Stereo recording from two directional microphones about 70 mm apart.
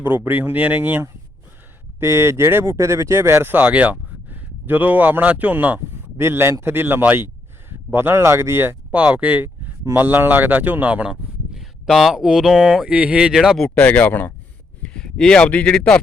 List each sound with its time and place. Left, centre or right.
0.0 s speech: right
2.0 s speech: right
6.1 s speech: right
8.9 s speech: centre
11.0 s speech: centre
13.9 s speech: left
14.8 s a sound: centre